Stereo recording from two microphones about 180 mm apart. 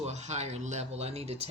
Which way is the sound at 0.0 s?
40° right (ahead or behind).